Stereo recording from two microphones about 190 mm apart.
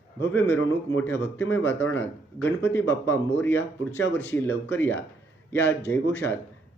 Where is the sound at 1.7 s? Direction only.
75° left (ahead or behind).